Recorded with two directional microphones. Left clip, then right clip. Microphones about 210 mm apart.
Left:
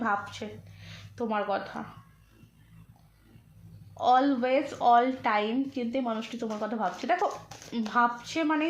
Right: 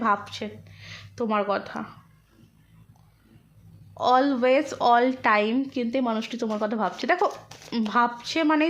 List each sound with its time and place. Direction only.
0.0 s speech: 40° right (ahead or behind)
3.9 s speech: 45° right (ahead or behind)